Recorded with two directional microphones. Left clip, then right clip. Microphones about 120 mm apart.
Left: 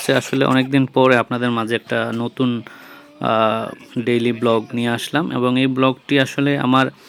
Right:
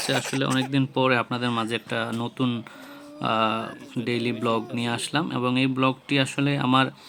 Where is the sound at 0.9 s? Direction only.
25° left (ahead or behind).